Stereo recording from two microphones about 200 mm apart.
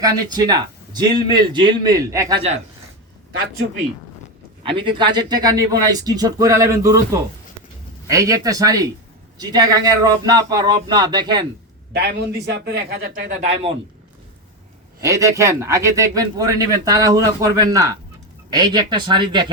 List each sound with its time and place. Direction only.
0.0 s speech: 20° right (ahead or behind)
4.6 s speech: 25° right (ahead or behind)
11.9 s a man's voice: 55° right (ahead or behind)
15.0 s speech: 15° right (ahead or behind)